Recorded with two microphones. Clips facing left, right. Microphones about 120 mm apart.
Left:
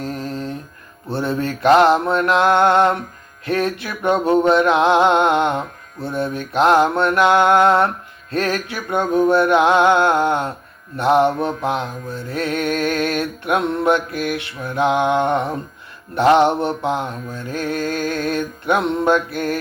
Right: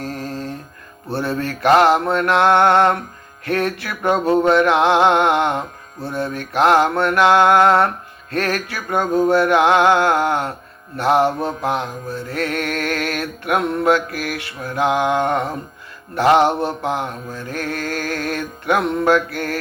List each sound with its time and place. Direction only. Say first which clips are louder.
0.0 s music: left 1 dB; 20° left (ahead or behind)
1.1 s mantra: left 1 dB; 20° left (ahead or behind)